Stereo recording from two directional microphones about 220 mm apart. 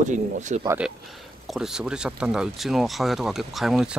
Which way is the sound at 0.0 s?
35° right (ahead or behind).